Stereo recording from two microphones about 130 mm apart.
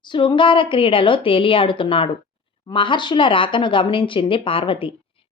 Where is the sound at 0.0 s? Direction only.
35° left (ahead or behind).